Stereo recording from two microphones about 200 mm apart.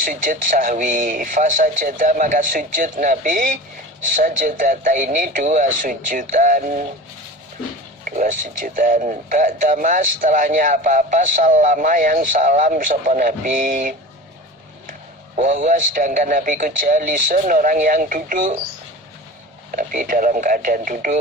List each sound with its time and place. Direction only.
0.0 s speech: 40° right (ahead or behind)
8.0 s speech: 40° right (ahead or behind)
15.4 s speech: 40° right (ahead or behind)
19.7 s speech: 40° right (ahead or behind)